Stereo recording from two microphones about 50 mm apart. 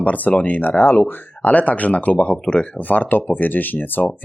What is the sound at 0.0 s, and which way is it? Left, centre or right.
Speech, left.